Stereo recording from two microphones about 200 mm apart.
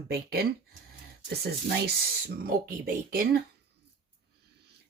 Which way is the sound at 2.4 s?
45° right (ahead or behind).